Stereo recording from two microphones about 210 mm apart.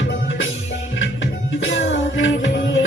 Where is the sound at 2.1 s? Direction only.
60° left (ahead or behind).